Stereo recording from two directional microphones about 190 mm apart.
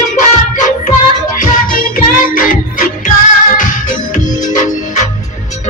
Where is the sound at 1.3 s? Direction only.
45° left (ahead or behind).